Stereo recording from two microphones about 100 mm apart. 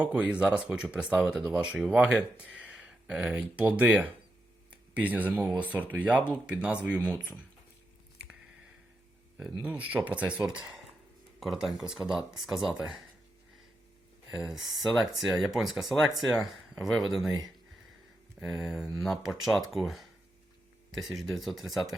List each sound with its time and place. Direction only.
0.0 s speech: 10° right (ahead or behind)
9.6 s speech: 15° right (ahead or behind)
14.3 s speech: 5° right (ahead or behind)